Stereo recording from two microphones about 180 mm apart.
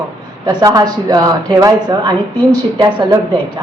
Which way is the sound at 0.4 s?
20° right (ahead or behind).